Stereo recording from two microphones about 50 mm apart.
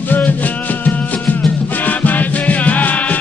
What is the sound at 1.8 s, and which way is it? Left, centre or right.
Music, left.